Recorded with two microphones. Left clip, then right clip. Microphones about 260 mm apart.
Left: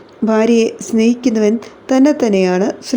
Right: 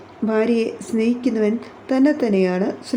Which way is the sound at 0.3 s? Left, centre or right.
Left.